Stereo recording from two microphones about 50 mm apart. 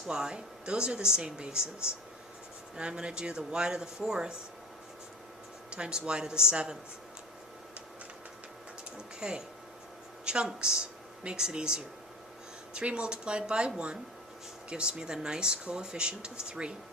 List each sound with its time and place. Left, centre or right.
0.1 s speech: centre
2.7 s speech: centre
5.7 s speech: centre
9.2 s speech: centre